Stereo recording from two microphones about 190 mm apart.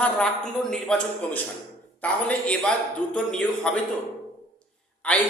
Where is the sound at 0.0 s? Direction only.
5° left (ahead or behind).